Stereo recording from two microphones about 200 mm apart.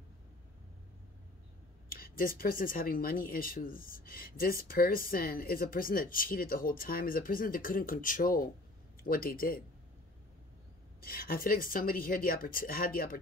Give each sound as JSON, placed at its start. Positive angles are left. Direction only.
{"t": 1.9, "sound": "speech", "side_deg": 45}
{"t": 11.0, "sound": "speech", "side_deg": 45}